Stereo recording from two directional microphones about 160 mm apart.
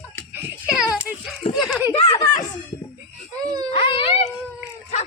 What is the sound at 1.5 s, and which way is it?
Giggle, centre (ahead or behind).